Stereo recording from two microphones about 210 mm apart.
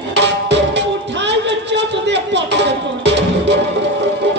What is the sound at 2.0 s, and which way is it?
Music, 55° right (ahead or behind).